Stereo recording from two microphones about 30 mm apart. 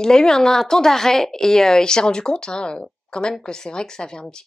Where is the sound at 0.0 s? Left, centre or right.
Left.